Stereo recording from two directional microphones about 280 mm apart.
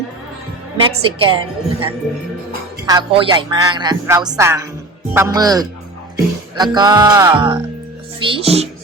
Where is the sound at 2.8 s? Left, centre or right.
Centre.